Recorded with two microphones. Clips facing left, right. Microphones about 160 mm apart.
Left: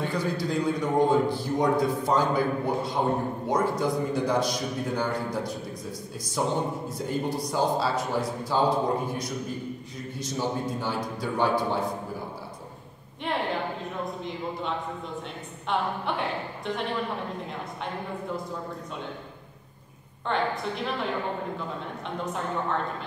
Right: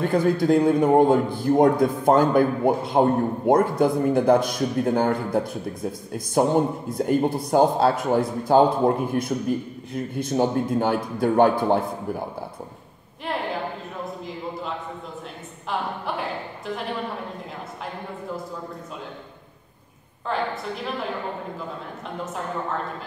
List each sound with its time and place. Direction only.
0.0 s a man's voice: 50° right (ahead or behind)
14.0 s a sound: centre (ahead or behind)
15.7 s a woman's voice: centre (ahead or behind)
20.2 s a woman's voice: centre (ahead or behind)